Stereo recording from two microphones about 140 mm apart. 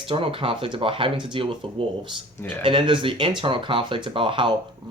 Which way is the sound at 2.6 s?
35° right (ahead or behind).